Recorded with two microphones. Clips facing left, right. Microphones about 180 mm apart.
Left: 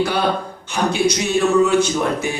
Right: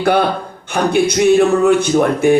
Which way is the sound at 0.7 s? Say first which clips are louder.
Right 4 dB; 55° right (ahead or behind).